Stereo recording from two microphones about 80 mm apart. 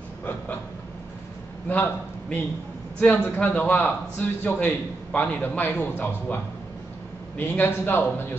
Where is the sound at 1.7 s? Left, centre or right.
Left.